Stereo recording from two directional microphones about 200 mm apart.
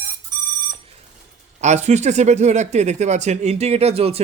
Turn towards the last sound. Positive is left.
turn(degrees=-30)  # may be behind; listen again after turning